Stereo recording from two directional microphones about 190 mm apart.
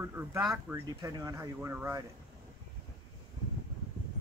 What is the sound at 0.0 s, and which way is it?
Speech, 10° right (ahead or behind).